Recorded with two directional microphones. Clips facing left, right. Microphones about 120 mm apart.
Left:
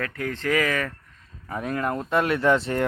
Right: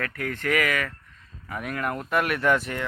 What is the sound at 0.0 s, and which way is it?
Speech, 20° left (ahead or behind).